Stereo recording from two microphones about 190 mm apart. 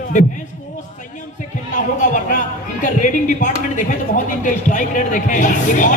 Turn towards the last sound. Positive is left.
turn(degrees=45)  # may be behind; listen again after turning